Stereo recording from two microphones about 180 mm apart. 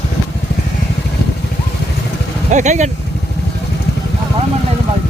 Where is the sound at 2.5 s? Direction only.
40° right (ahead or behind).